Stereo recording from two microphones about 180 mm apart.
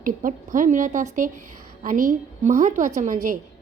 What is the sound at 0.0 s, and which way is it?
A woman's voice, 50° right (ahead or behind).